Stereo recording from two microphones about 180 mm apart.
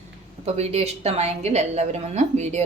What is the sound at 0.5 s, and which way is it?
Speech, 35° right (ahead or behind).